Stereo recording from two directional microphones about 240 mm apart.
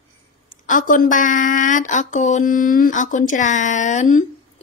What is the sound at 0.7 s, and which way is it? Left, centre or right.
Speech, left.